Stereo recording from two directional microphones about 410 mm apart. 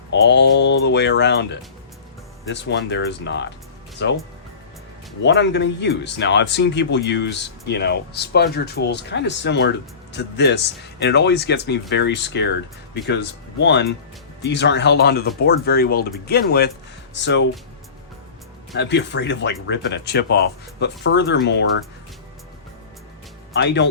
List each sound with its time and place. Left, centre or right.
0.1 s speech: left
5.2 s speech: left
18.8 s speech: left
23.6 s speech: left